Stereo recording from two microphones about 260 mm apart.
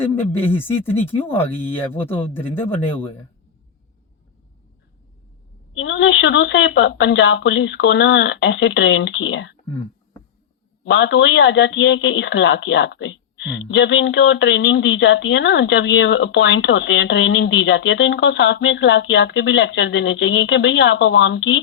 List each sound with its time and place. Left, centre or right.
0.2 s speech: centre
5.7 s speech: left
10.8 s speech: left